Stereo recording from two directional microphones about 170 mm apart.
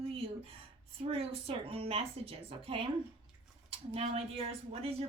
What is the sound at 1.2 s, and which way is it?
A woman's voice, 35° right (ahead or behind).